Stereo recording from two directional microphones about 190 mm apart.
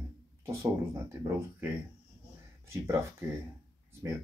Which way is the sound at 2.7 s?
15° right (ahead or behind).